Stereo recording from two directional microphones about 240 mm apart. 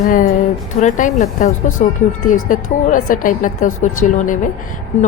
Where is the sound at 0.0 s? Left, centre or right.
Left.